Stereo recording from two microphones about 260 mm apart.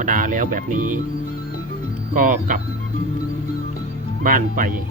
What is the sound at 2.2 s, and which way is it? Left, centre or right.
Speech, right.